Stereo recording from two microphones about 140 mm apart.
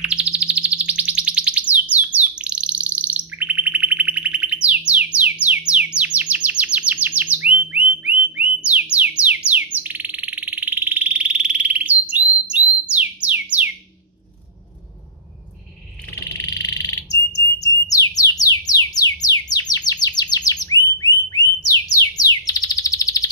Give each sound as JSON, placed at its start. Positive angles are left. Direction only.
{"t": 0.0, "sound": "bird", "side_deg": -10}
{"t": 9.5, "sound": "frog", "side_deg": -10}
{"t": 12.9, "sound": "theremin", "side_deg": -10}
{"t": 16.3, "sound": "bird", "side_deg": 25}
{"t": 19.2, "sound": "chirp", "side_deg": 30}
{"t": 22.5, "sound": "chirp", "side_deg": 25}